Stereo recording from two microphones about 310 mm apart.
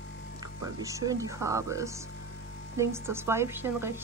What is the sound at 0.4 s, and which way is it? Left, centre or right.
A woman's voice, centre.